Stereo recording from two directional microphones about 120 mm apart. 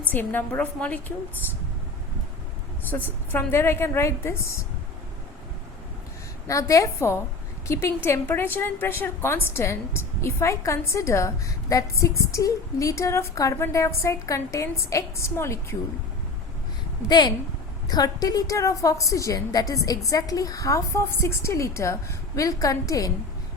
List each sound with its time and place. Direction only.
0.1 s a woman's voice: 15° left (ahead or behind)
2.9 s a woman's voice: 20° left (ahead or behind)
6.5 s a woman's voice: 25° left (ahead or behind)
17.1 s a woman's voice: 35° left (ahead or behind)